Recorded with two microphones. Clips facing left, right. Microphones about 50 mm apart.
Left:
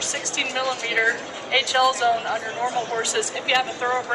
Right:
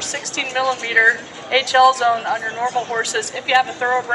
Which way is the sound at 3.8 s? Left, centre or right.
Centre.